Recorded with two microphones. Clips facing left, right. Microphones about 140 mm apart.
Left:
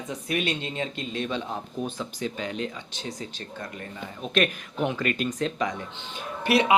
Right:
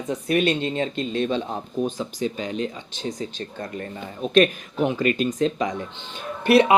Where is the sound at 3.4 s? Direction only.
45° right (ahead or behind).